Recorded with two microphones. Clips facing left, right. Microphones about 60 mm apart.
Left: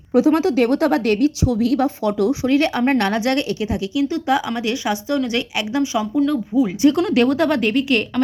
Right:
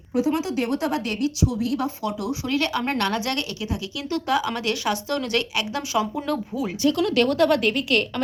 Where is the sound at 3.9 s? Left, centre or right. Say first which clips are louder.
Left 5 dB; centre.